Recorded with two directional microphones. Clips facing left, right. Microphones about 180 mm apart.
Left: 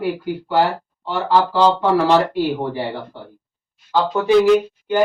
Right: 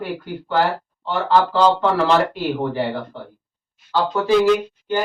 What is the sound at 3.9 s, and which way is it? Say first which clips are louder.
Speech: left 2 dB; 15° left (ahead or behind).